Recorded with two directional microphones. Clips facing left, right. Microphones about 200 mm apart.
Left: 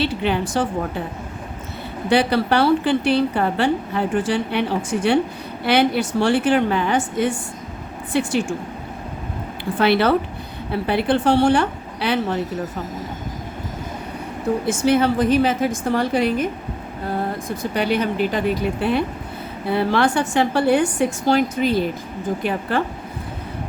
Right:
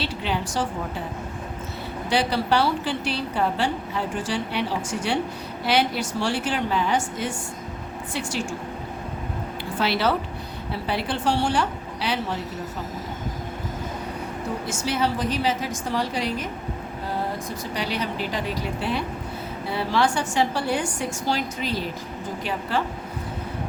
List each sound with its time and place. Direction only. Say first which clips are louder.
0.0 s a woman's voice: left 7 dB; 60° left (ahead or behind)
2.0 s a woman's voice: left 5 dB; 60° left (ahead or behind)
9.7 s a woman's voice: left 7 dB; 55° left (ahead or behind)
14.7 s a woman's voice: left 8 dB; 55° left (ahead or behind)
17.6 s a woman's voice: left 9 dB; 55° left (ahead or behind)